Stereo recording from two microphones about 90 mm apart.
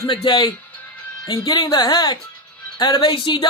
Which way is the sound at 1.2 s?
50° left (ahead or behind).